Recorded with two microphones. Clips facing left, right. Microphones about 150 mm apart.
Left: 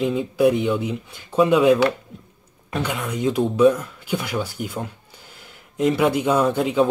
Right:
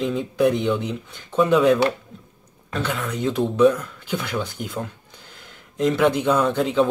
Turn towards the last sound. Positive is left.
turn(degrees=10)  # may be behind; listen again after turning